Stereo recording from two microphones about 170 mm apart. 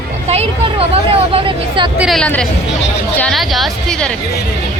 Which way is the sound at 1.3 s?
30° right (ahead or behind).